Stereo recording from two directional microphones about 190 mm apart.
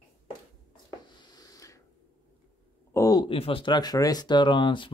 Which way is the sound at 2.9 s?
20° left (ahead or behind).